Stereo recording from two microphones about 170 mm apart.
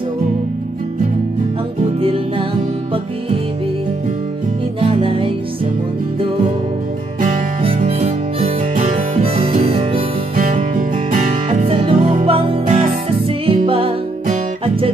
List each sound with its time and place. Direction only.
2.0 s music: 35° right (ahead or behind)
4.7 s music: 30° right (ahead or behind)
7.8 s harmonica: 45° right (ahead or behind)
9.7 s music: 30° right (ahead or behind)
10.3 s music: 50° right (ahead or behind); by 13.9 s 35° right (ahead or behind)